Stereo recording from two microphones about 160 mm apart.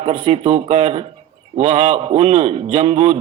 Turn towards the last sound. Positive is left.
turn(degrees=-40)  # may be behind; listen again after turning